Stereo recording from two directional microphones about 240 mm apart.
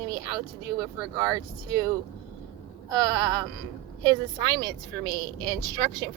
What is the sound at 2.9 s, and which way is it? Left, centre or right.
A woman's voice, centre.